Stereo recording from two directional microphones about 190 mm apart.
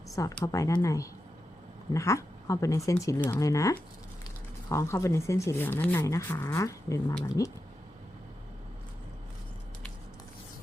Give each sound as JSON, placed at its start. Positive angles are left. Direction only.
{"t": 0.4, "sound": "speech", "side_deg": 15}